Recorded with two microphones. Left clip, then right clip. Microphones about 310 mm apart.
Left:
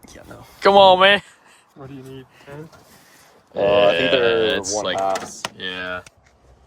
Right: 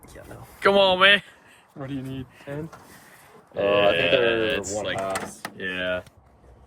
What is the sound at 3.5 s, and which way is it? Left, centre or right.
Speech, left.